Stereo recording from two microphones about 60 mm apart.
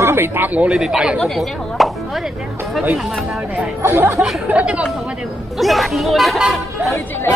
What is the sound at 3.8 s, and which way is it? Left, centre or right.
Speech, right.